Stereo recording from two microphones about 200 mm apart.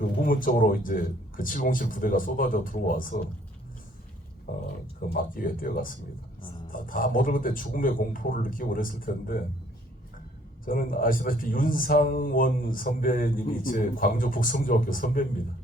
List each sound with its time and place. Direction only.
0.3 s speech: 45° left (ahead or behind)
4.5 s speech: 50° left (ahead or behind)
10.7 s speech: 45° left (ahead or behind)